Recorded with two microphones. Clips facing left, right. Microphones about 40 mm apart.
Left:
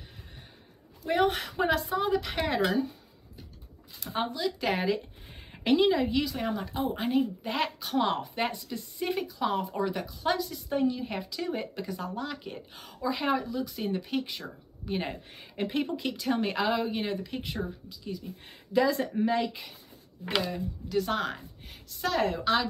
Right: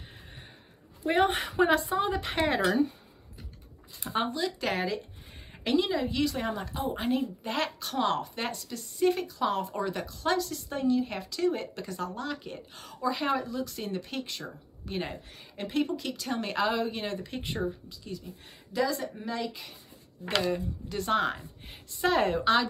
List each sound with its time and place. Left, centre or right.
1.0 s a woman's voice: right
2.7 s speech: right
4.2 s speech: centre
4.5 s speech: centre
17.3 s speech: centre
18.7 s speech: left
20.4 s speech: centre
21.6 s a woman's voice: right
22.4 s speech: centre